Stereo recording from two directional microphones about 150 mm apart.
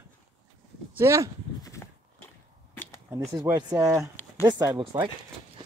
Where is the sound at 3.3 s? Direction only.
25° right (ahead or behind).